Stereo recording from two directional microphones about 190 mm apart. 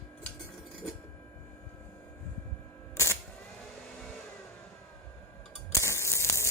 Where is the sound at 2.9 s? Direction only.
15° left (ahead or behind).